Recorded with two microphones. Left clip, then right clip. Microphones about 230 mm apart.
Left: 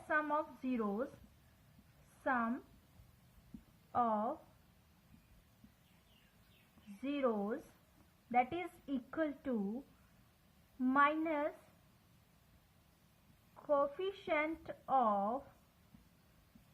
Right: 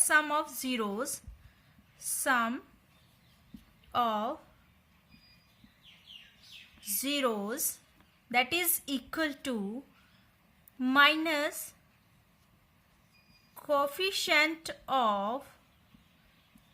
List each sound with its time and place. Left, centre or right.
0.1 s a woman's voice: right
2.2 s a woman's voice: right
3.9 s a woman's voice: right
7.0 s a woman's voice: right
10.8 s a woman's voice: right
13.6 s a woman's voice: right